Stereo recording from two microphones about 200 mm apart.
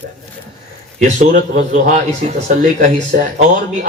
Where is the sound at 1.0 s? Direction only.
40° right (ahead or behind).